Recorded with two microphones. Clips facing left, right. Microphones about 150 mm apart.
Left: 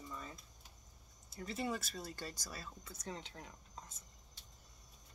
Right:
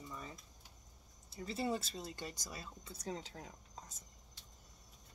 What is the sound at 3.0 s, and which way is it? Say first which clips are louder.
Speech: right 4 dB; 35° right (ahead or behind).